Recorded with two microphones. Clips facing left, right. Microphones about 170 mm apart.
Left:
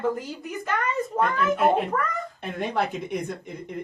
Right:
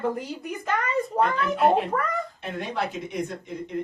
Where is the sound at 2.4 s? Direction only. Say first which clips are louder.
Left 3 dB; 55° left (ahead or behind).